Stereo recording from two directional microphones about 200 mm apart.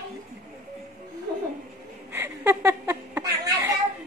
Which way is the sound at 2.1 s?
10° right (ahead or behind).